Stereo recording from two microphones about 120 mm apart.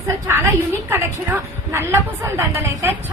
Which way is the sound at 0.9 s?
15° right (ahead or behind).